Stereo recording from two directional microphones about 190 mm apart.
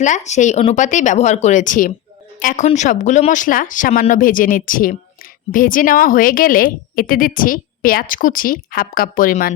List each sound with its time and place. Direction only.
0.0 s speech: 40° left (ahead or behind)